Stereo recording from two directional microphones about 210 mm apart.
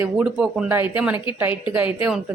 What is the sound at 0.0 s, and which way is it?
Speech, 5° right (ahead or behind).